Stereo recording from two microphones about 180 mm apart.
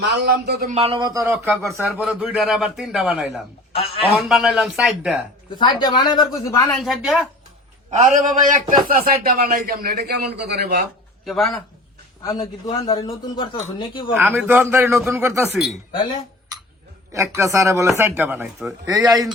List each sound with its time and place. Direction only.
0.0 s speech: 65° right (ahead or behind)
0.9 s speech: 20° right (ahead or behind)
1.9 s a man's voice: 5° right (ahead or behind)
5.5 s a man's voice: 25° left (ahead or behind)
6.7 s a man's voice: centre (ahead or behind)
7.9 s a man's voice: 45° right (ahead or behind); by 10.8 s 65° right (ahead or behind)
11.3 s a man's voice: centre (ahead or behind)
12.2 s a man's voice: 20° left (ahead or behind)
14.1 s speech: 10° right (ahead or behind)
17.1 s speech: 15° right (ahead or behind)